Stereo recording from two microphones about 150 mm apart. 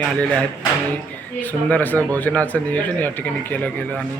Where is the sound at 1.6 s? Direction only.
10° left (ahead or behind).